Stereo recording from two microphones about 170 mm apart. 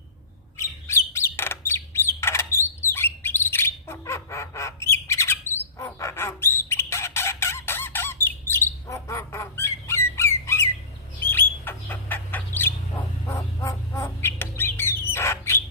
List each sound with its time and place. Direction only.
0.5 s bird: 15° left (ahead or behind)
10.2 s squawk: 15° left (ahead or behind)
11.2 s bird: 10° left (ahead or behind)